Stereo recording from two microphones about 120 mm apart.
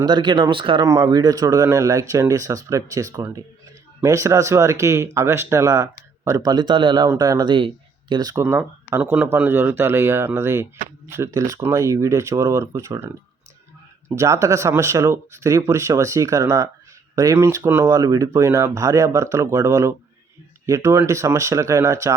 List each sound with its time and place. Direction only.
0.0 s speech: 35° right (ahead or behind)
0.9 s speech: 30° right (ahead or behind)
8.9 s speech: 15° right (ahead or behind)
14.2 s speech: 25° right (ahead or behind)